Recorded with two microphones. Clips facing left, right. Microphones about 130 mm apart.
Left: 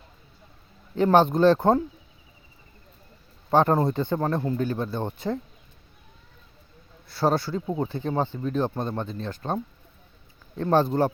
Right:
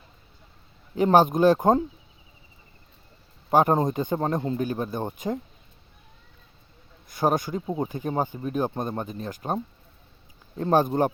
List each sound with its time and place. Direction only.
0.9 s speech: 15° right (ahead or behind)
3.5 s speech: 15° right (ahead or behind)
7.1 s speech: 15° right (ahead or behind)
10.7 s speech: 15° right (ahead or behind)